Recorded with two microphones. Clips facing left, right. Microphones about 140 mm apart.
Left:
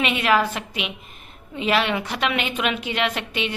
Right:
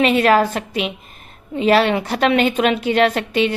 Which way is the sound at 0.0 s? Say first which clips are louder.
Right 6 dB; 40° right (ahead or behind).